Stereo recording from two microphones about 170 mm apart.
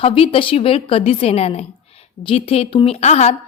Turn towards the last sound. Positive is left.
turn(degrees=40)  # may be behind; listen again after turning